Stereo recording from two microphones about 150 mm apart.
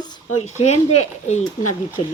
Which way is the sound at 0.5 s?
50° left (ahead or behind).